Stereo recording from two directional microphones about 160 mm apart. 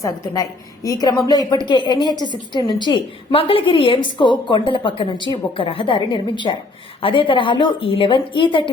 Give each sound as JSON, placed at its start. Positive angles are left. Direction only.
{"t": 0.0, "sound": "a woman's voice", "side_deg": 20}